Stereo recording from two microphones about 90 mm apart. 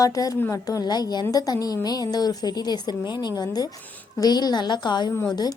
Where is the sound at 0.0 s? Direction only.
40° left (ahead or behind).